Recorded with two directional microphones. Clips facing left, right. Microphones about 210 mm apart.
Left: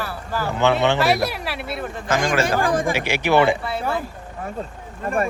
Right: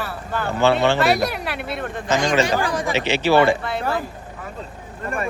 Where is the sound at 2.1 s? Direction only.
50° left (ahead or behind).